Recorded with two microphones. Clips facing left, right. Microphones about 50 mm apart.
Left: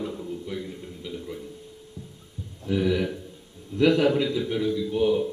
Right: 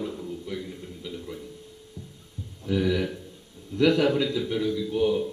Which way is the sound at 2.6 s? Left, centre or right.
Centre.